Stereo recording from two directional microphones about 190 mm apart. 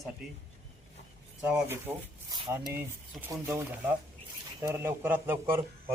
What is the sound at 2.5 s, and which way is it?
Speech, 10° right (ahead or behind).